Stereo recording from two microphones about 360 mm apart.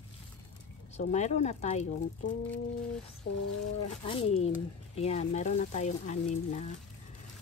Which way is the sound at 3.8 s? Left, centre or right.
Centre.